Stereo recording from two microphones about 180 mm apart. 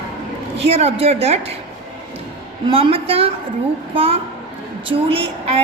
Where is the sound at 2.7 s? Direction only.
30° right (ahead or behind).